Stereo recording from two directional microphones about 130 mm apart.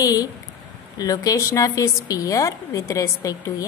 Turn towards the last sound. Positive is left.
turn(degrees=25)  # may be behind; listen again after turning